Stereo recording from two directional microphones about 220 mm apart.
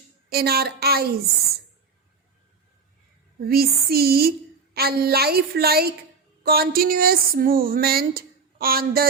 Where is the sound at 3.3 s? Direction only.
45° right (ahead or behind).